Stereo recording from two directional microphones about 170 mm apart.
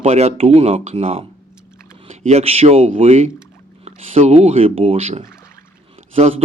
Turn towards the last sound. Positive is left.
turn(degrees=-40)  # may be behind; listen again after turning